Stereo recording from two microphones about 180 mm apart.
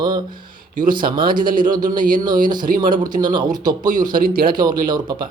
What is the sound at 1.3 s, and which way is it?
Speech, 50° right (ahead or behind).